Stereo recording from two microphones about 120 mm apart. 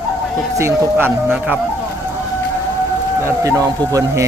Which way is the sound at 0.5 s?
20° right (ahead or behind).